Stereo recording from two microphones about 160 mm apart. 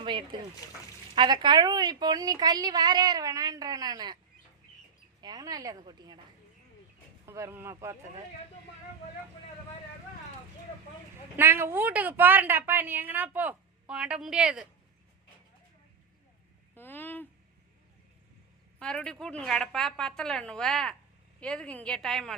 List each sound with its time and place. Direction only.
0.0 s a sound: 30° right (ahead or behind)
1.1 s a woman's voice: 30° right (ahead or behind)
5.2 s a woman's voice: 25° right (ahead or behind)
7.3 s a woman's voice: 15° right (ahead or behind)
11.3 s a woman's voice: 15° right (ahead or behind)
16.7 s speech: 10° left (ahead or behind)
18.8 s speech: 5° left (ahead or behind)